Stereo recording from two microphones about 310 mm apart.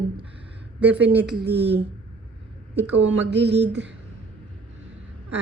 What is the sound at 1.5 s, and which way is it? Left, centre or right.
Speech, centre.